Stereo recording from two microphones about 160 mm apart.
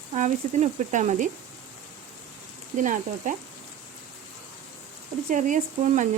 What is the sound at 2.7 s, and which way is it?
Frying, 55° right (ahead or behind).